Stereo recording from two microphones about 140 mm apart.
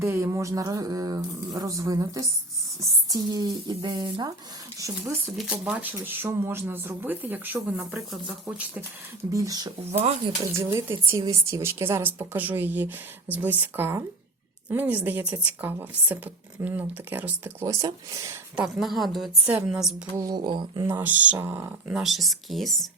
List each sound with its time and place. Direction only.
0.0 s speech: 20° right (ahead or behind)
5.4 s speech: 5° right (ahead or behind)
9.3 s speech: 25° right (ahead or behind)
10.0 s speech: 50° right (ahead or behind)
10.4 s speech: 20° right (ahead or behind)
18.5 s a woman's voice: centre (ahead or behind)
20.1 s a sound: 30° right (ahead or behind)
20.8 s speech: 15° right (ahead or behind)
22.0 s a woman's voice: centre (ahead or behind)